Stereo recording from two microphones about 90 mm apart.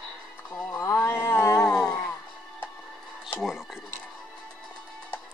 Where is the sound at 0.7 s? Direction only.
25° left (ahead or behind).